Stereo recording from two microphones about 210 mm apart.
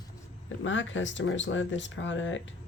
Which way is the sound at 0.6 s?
65° left (ahead or behind).